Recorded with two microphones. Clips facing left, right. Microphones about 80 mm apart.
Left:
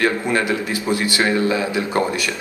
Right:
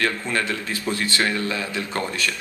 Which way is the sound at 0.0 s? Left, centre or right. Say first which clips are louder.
Left 5 dB; centre.